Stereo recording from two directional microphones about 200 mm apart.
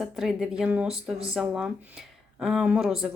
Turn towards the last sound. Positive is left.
turn(degrees=0)  # may be behind; listen again after turning